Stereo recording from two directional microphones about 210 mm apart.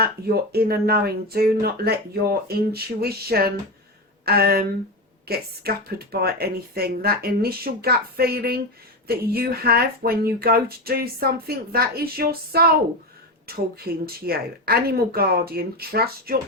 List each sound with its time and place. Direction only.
0.0 s speech: 50° right (ahead or behind)